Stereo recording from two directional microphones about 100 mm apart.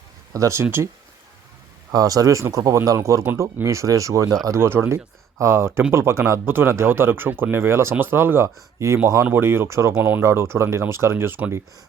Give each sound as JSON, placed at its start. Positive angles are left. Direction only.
{"t": 0.3, "sound": "speech", "side_deg": -30}
{"t": 1.9, "sound": "speech", "side_deg": -40}